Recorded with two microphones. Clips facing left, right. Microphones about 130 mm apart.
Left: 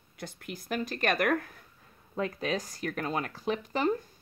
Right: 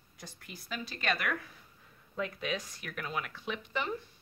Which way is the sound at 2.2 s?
35° left (ahead or behind).